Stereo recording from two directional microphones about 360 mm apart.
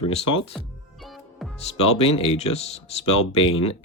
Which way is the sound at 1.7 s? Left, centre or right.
Centre.